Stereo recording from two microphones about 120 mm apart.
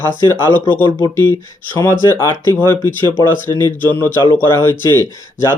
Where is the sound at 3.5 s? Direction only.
30° left (ahead or behind).